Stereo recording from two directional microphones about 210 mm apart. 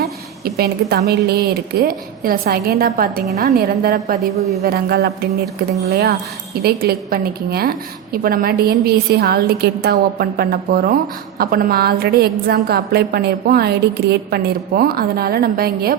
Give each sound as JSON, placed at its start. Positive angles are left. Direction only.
{"t": 0.0, "sound": "a woman's voice", "side_deg": -50}
{"t": 4.2, "sound": "a woman's voice", "side_deg": 0}
{"t": 4.6, "sound": "a woman's voice", "side_deg": -50}